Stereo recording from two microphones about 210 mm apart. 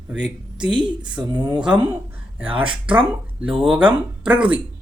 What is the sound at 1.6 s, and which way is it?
Speech, 5° right (ahead or behind).